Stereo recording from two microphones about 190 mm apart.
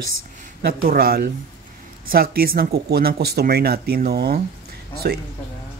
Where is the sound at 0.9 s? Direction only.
50° right (ahead or behind).